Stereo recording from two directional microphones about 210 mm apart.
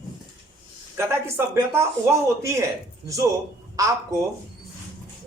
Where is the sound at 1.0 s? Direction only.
10° right (ahead or behind).